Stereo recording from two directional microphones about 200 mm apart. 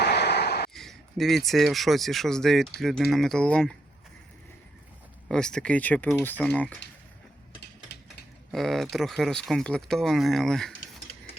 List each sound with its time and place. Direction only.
0.0 s a sound: 55° left (ahead or behind)
0.7 s speech: centre (ahead or behind)
5.3 s speech: 5° left (ahead or behind)
8.5 s speech: centre (ahead or behind)